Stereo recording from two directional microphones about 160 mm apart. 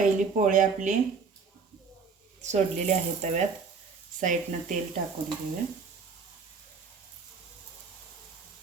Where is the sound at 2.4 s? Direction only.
45° right (ahead or behind).